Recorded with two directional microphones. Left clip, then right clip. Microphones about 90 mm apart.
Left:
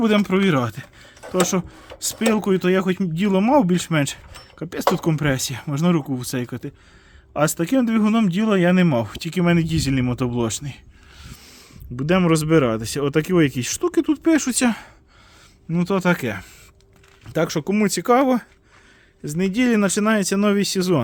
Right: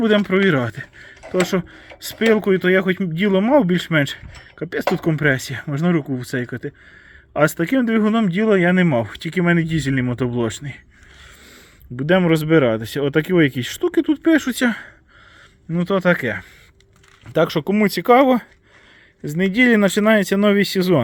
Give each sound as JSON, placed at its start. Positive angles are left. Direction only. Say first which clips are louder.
{"t": 0.0, "sound": "speech", "louder": "right 3 dB", "side_deg": 20}
{"t": 7.3, "sound": "speech", "louder": "right 2 dB", "side_deg": 5}
{"t": 11.9, "sound": "speech", "louder": "right 3 dB", "side_deg": 20}
{"t": 17.3, "sound": "speech", "louder": "right 4 dB", "side_deg": 0}